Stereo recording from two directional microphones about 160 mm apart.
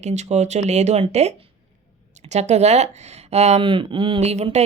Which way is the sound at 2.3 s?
45° right (ahead or behind).